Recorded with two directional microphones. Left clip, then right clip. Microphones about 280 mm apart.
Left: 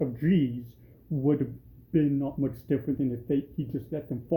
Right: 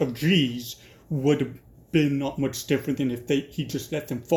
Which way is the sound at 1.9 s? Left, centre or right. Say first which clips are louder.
Right 3 dB; right.